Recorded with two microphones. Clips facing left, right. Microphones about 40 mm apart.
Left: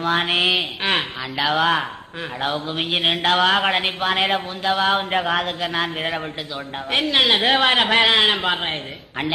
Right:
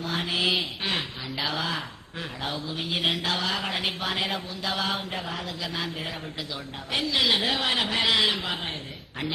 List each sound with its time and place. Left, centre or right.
0.0 s speech: left
5.5 s speech: left